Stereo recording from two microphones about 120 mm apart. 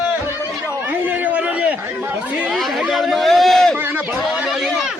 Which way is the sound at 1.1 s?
15° right (ahead or behind).